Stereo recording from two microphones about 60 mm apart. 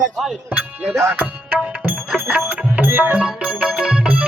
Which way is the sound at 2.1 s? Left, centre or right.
Right.